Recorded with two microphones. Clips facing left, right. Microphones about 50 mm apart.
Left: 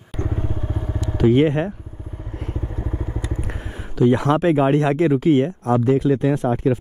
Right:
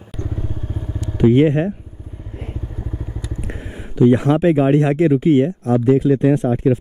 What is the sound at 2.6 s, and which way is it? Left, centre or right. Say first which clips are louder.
Vehicle: left 2 dB; left.